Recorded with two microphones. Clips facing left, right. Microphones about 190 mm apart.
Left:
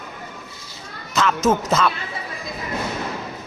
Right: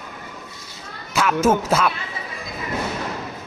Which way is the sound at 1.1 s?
10° right (ahead or behind).